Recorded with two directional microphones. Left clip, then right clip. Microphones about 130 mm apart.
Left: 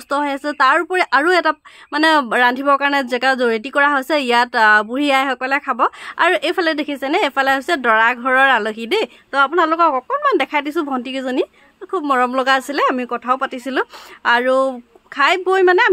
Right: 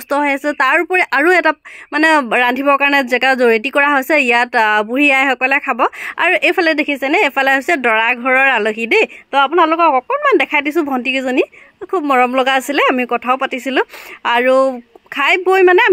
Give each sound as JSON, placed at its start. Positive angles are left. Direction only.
{"t": 0.1, "sound": "speech", "side_deg": -25}